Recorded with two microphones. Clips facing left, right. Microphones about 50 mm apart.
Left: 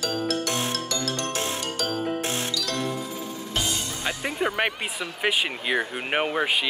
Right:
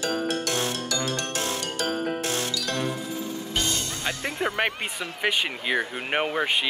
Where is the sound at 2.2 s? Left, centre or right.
Left.